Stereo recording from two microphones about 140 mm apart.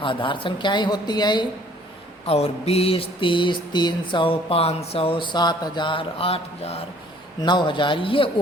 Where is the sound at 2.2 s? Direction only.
45° left (ahead or behind).